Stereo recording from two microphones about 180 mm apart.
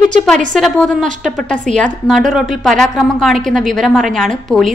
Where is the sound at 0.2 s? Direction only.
5° left (ahead or behind).